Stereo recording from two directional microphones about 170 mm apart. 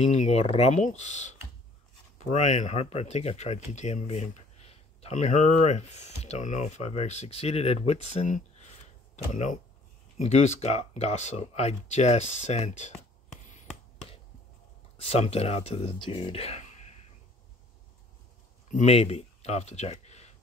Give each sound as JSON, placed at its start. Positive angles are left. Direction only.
{"t": 0.1, "sound": "speech", "side_deg": 40}
{"t": 13.4, "sound": "a sound", "side_deg": 45}
{"t": 15.0, "sound": "speech", "side_deg": 35}
{"t": 18.7, "sound": "speech", "side_deg": 40}